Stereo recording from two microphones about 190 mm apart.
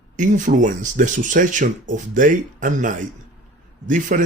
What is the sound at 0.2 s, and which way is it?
Speech, 40° right (ahead or behind).